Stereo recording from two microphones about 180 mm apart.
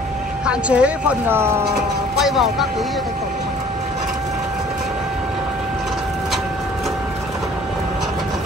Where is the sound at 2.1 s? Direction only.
Centre (ahead or behind).